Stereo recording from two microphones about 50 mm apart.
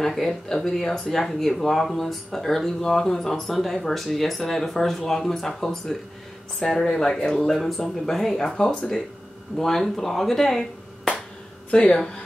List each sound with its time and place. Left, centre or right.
0.0 s speech: centre